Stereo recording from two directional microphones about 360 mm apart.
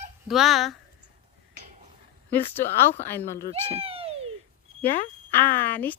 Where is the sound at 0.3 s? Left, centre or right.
Centre.